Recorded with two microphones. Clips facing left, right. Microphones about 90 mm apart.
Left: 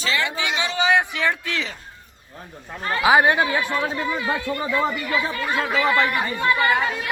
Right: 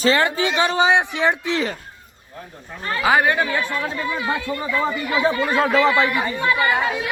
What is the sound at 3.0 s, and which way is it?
Speech, 15° left (ahead or behind).